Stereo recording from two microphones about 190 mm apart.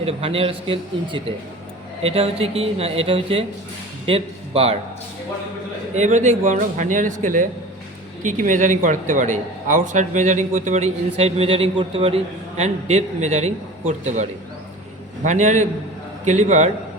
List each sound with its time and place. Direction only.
0.0 s a man's voice: 30° right (ahead or behind)
5.9 s a man's voice: 40° right (ahead or behind)